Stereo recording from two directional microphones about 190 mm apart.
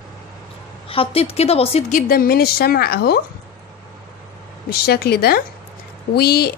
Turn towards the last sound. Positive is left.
turn(degrees=55)  # may be behind; listen again after turning